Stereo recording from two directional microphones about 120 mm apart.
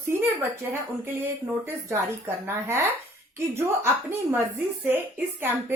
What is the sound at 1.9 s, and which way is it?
A woman's voice, 20° right (ahead or behind).